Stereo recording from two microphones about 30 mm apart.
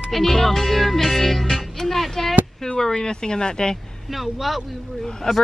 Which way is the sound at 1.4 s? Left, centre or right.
Centre.